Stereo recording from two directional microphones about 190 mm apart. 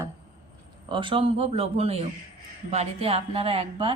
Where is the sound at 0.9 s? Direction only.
25° right (ahead or behind).